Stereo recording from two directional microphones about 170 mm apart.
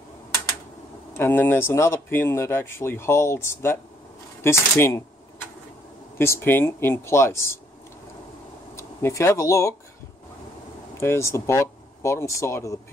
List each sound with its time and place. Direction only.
1.1 s speech: 15° left (ahead or behind)
6.1 s speech: 15° left (ahead or behind)
8.7 s speech: 15° left (ahead or behind)
11.0 s speech: 15° left (ahead or behind)